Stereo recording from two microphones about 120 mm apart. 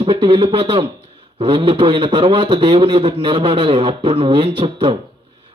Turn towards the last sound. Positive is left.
turn(degrees=-45)  # may be behind; listen again after turning